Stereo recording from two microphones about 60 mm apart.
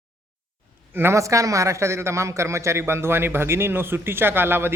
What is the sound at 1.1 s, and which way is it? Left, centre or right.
A man's voice, right.